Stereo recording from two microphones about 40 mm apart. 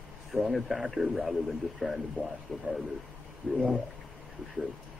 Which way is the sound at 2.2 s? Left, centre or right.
Left.